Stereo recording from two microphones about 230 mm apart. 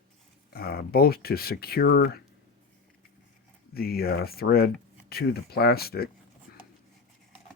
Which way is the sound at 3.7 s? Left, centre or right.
Left.